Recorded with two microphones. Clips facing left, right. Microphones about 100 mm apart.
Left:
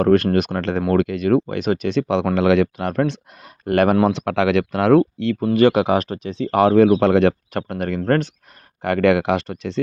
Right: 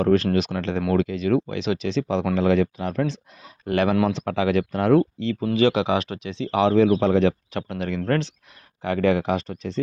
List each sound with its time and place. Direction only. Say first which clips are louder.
0.0 s speech: left 4 dB; 60° left (ahead or behind)
4.3 s speech: left 4 dB; 90° left; by 5.5 s 60° left (ahead or behind)
5.5 s speech: left 5 dB; 50° left (ahead or behind)
7.0 s speech: left 4 dB; 65° left (ahead or behind); by 8.3 s 45° left (ahead or behind)
8.8 s speech: left 4 dB; 65° left (ahead or behind)